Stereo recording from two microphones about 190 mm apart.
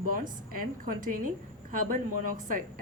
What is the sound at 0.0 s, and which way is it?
A woman's voice, 50° right (ahead or behind).